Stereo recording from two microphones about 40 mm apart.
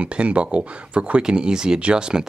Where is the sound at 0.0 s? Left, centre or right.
Right.